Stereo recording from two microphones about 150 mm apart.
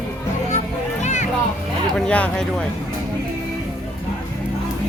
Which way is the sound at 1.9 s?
5° left (ahead or behind).